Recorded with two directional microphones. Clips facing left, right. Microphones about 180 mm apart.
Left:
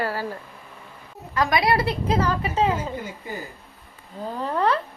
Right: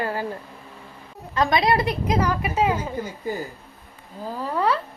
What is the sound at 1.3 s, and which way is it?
A woman's voice, 20° right (ahead or behind).